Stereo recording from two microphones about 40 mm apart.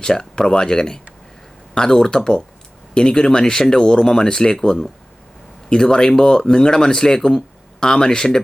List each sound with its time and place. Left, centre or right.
0.0 s speech: centre